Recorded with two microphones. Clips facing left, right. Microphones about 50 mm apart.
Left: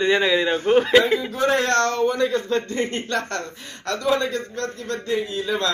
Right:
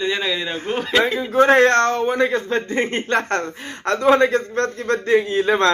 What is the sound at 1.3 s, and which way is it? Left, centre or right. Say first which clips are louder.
Speech: right 10 dB; right.